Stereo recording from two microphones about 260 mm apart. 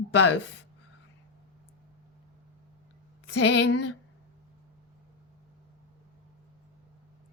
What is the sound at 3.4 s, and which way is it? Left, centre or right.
Speech, left.